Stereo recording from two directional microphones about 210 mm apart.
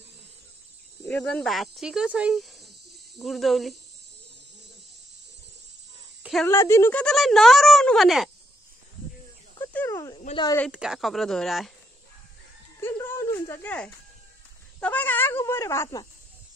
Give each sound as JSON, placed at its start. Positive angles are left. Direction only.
{"t": 1.0, "sound": "speech", "side_deg": 0}
{"t": 6.4, "sound": "speech", "side_deg": 15}
{"t": 9.7, "sound": "a sound", "side_deg": 10}
{"t": 10.1, "sound": "speech", "side_deg": 25}
{"t": 10.7, "sound": "speech", "side_deg": -5}
{"t": 12.8, "sound": "music", "side_deg": 10}
{"t": 14.8, "sound": "speech", "side_deg": 10}